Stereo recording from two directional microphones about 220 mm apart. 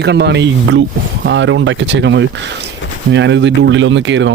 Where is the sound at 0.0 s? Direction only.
50° right (ahead or behind).